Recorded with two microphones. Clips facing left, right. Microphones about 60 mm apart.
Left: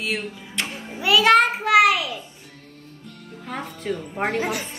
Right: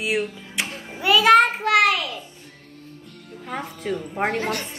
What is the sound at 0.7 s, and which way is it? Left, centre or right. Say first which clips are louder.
Music: right 1 dB; centre.